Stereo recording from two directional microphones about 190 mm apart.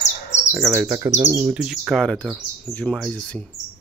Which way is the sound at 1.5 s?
5° right (ahead or behind).